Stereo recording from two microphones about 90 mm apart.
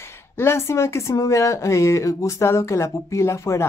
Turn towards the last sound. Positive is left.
turn(degrees=30)  # may be behind; listen again after turning